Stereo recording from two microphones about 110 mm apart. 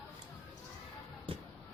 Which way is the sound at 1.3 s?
60° right (ahead or behind).